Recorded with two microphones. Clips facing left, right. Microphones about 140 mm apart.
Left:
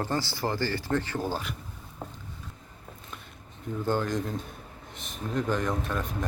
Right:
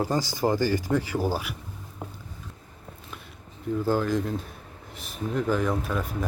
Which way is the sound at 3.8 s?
5° right (ahead or behind).